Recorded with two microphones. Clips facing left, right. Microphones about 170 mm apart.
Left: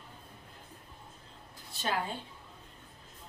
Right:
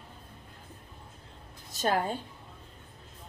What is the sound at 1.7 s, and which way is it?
Speech, 45° right (ahead or behind).